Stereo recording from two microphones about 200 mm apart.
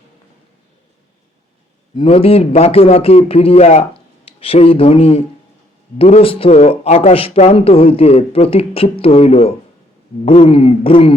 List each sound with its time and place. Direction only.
2.0 s speech: 30° left (ahead or behind)